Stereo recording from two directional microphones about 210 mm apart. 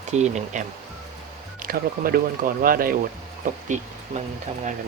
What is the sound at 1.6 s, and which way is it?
Speech, 45° right (ahead or behind).